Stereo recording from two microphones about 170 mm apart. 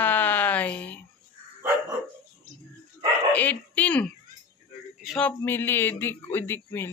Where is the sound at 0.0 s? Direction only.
10° left (ahead or behind).